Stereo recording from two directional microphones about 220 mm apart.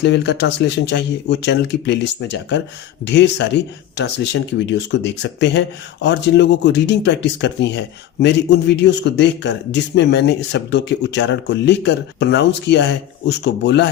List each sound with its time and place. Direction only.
0.0 s speech: 50° left (ahead or behind)